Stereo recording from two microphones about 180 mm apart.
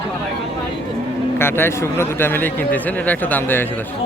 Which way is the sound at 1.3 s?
10° left (ahead or behind).